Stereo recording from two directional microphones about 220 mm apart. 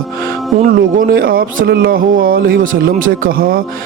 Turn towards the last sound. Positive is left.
turn(degrees=-40)  # may be behind; listen again after turning